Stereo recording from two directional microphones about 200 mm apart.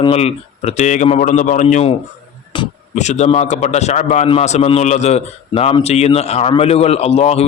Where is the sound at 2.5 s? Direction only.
25° left (ahead or behind).